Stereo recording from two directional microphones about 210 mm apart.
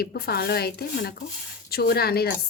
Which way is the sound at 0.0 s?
50° left (ahead or behind).